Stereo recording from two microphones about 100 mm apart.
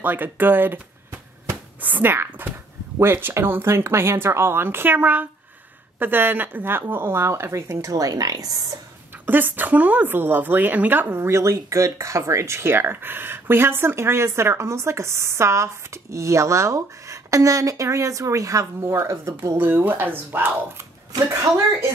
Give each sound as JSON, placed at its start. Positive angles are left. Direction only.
{"t": 0.0, "sound": "a woman's voice", "side_deg": -20}
{"t": 9.2, "sound": "a woman's voice", "side_deg": -20}